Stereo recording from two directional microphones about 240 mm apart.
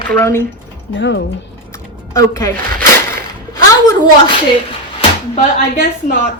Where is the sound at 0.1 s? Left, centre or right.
Centre.